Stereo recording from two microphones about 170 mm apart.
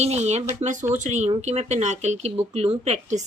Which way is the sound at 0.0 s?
40° right (ahead or behind).